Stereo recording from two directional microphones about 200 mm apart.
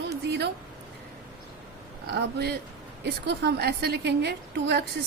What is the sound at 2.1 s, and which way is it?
A woman's voice, 55° right (ahead or behind).